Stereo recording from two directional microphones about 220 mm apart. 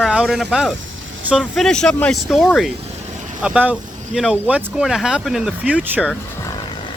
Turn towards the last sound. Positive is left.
turn(degrees=-5)  # may be behind; listen again after turning